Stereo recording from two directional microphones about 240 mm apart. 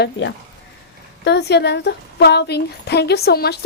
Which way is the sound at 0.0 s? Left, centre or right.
Left.